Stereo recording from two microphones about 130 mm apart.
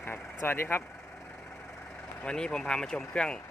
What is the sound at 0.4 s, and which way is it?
Speech, 15° left (ahead or behind).